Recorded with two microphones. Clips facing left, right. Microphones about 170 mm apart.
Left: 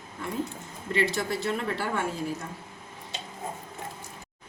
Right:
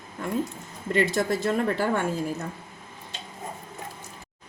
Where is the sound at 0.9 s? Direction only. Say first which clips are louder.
Right 4 dB; 50° right (ahead or behind).